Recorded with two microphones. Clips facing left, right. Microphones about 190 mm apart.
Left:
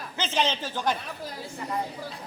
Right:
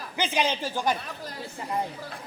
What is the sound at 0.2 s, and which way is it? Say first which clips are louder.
Speech: right 1 dB; 10° right (ahead or behind).